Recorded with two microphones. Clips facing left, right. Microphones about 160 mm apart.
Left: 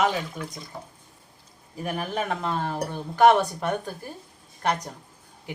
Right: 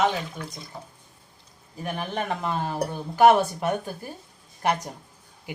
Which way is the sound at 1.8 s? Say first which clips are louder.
Left 1 dB; 5° left (ahead or behind).